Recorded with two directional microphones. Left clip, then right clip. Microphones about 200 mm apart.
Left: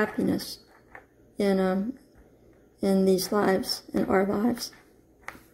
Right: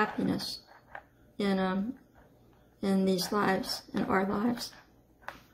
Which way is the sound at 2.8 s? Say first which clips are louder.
Left 6 dB; 15° left (ahead or behind).